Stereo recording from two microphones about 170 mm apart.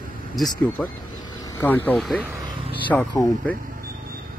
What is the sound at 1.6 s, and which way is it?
Speech, 10° left (ahead or behind).